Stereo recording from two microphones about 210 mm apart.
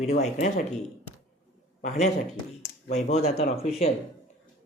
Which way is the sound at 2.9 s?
30° left (ahead or behind).